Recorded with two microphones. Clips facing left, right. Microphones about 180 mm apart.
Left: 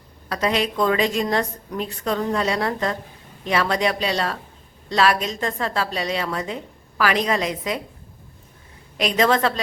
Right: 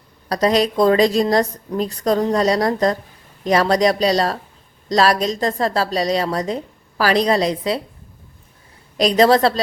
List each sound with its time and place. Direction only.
0.3 s a woman's voice: 35° right (ahead or behind)
9.0 s a woman's voice: 35° right (ahead or behind)